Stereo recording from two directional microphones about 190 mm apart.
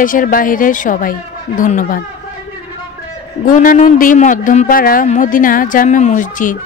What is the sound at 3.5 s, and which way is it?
Speech, 45° left (ahead or behind).